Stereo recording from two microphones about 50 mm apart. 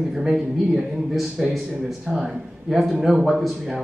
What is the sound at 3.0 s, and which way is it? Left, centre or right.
Speech, centre.